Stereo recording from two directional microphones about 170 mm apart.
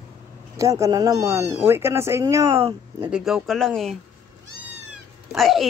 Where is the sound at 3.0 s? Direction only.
5° right (ahead or behind).